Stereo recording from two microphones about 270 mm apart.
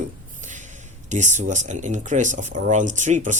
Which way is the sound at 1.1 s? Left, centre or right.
Right.